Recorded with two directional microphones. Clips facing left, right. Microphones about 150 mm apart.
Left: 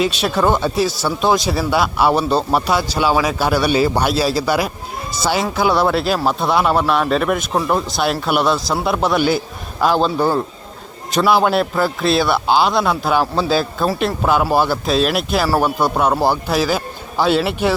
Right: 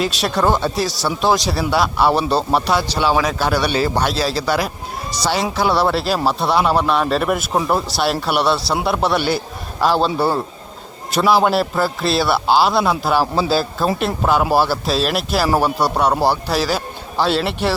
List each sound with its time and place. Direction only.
0.0 s speech: centre (ahead or behind)